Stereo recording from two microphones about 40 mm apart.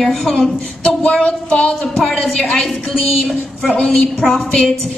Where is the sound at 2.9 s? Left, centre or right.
Centre.